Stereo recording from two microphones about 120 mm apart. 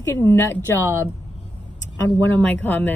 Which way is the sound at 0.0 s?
25° left (ahead or behind).